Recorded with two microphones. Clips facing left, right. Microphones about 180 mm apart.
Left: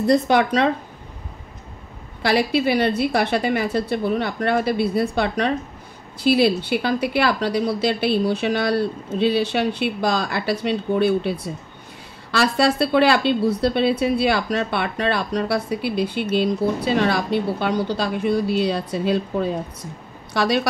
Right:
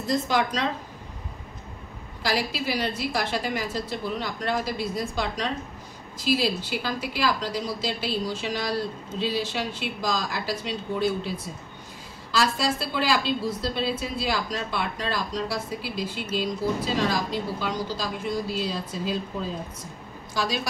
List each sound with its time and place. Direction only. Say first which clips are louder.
0.0 s a woman's voice: left 8 dB; 65° left (ahead or behind)
2.2 s a woman's voice: left 8 dB; 60° left (ahead or behind)